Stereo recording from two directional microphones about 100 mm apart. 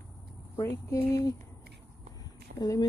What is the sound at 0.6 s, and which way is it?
Speech, 30° left (ahead or behind).